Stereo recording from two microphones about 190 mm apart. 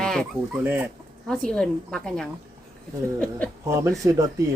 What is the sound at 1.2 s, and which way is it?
Speech, 5° left (ahead or behind).